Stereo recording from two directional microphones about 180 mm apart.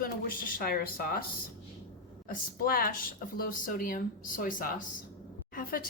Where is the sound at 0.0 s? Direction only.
50° left (ahead or behind).